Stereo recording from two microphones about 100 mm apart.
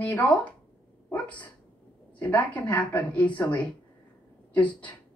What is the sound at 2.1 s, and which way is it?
A woman's voice, 15° left (ahead or behind).